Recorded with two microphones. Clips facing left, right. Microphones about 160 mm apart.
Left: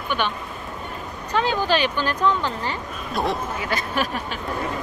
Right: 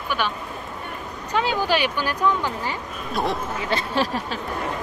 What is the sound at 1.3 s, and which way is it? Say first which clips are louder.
Speech: left 1 dB; 15° right (ahead or behind).